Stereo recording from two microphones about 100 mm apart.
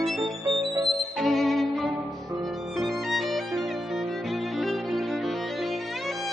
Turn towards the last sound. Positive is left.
turn(degrees=0)  # may be behind; listen again after turning